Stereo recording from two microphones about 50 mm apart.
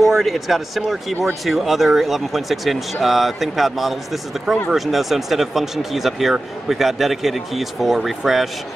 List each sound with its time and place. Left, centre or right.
0.0 s speech: centre